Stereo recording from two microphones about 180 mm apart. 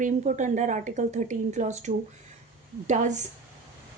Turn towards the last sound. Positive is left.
turn(degrees=-40)  # may be behind; listen again after turning